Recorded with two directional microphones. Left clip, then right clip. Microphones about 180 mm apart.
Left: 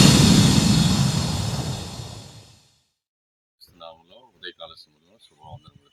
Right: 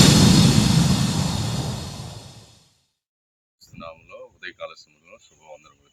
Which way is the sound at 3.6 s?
5° right (ahead or behind).